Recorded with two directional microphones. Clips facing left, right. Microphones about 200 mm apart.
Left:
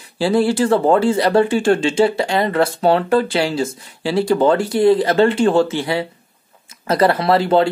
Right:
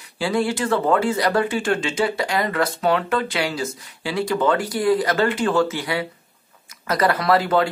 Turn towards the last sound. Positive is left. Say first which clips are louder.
# left 4 dB
turn(degrees=30)  # may be behind; listen again after turning